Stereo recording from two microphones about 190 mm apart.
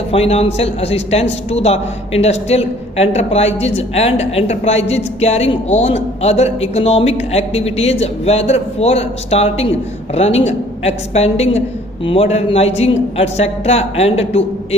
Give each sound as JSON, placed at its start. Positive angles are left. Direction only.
{"t": 0.1, "sound": "a woman's voice", "side_deg": 30}